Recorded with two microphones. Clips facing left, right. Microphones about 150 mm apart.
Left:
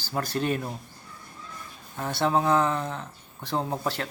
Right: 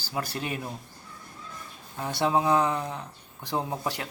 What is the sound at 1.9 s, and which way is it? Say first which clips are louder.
Speech: left 1 dB; 15° right (ahead or behind).